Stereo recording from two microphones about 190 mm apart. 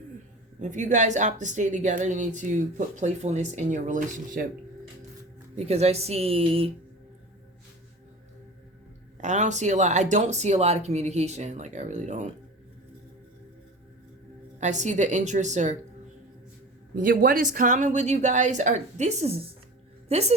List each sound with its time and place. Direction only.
0.6 s a woman's voice: 40° right (ahead or behind)
5.5 s a woman's voice: 35° right (ahead or behind)
9.2 s a woman's voice: 40° right (ahead or behind)
14.6 s a woman's voice: 40° right (ahead or behind)
16.9 s a woman's voice: 45° right (ahead or behind)